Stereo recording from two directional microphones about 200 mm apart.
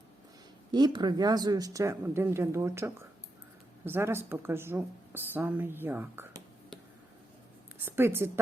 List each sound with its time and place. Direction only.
0.7 s speech: 20° right (ahead or behind)
7.9 s speech: 10° right (ahead or behind)